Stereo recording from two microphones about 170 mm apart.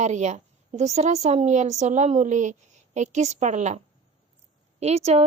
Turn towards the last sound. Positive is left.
turn(degrees=-40)  # may be behind; listen again after turning